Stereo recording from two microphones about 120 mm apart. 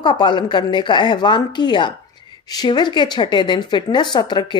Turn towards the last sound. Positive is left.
turn(degrees=40)  # may be behind; listen again after turning